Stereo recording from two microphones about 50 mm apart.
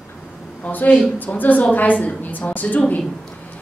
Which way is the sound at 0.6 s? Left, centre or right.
Left.